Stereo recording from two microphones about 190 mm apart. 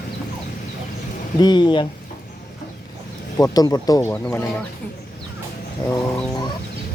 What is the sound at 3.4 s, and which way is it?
Speech, 20° left (ahead or behind).